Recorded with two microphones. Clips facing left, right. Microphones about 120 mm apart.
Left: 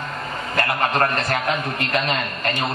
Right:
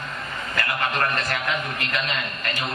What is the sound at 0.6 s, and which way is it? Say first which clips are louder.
Speech: left 5 dB; 45° left (ahead or behind).